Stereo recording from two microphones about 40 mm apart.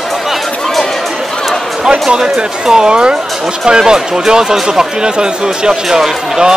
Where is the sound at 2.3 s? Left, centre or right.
Centre.